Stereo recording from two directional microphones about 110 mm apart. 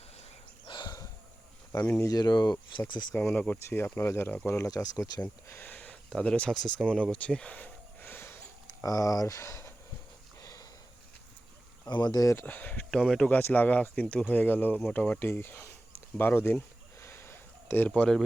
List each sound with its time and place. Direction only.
0.7 s a sound: 40° left (ahead or behind)
1.8 s speech: 15° left (ahead or behind)
2.0 s speech: 35° left (ahead or behind)
3.2 s speech: 10° left (ahead or behind)
4.7 s speech: 35° left (ahead or behind)
5.2 s speech: 15° left (ahead or behind)
8.8 s speech: 30° left (ahead or behind)
10.4 s a sound: 35° left (ahead or behind)
11.9 s speech: 45° left (ahead or behind)
12.3 s speech: 20° left (ahead or behind)
16.1 s a sound: 20° left (ahead or behind)